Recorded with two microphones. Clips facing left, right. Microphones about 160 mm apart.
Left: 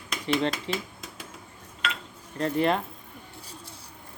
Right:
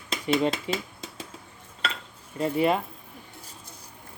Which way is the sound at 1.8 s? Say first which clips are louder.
Even; 30° right (ahead or behind).